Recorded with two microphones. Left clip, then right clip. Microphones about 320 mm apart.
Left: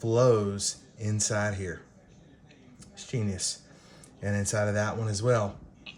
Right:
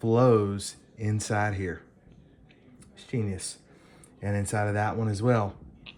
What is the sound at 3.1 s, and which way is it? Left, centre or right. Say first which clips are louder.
Speech: left 1 dB; centre.